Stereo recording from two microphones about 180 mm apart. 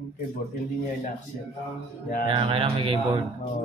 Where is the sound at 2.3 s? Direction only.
30° right (ahead or behind).